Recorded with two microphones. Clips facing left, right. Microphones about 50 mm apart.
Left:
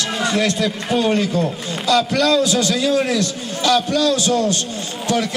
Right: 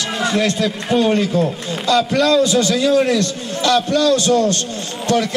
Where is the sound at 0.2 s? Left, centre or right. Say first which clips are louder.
Right 1 dB; centre.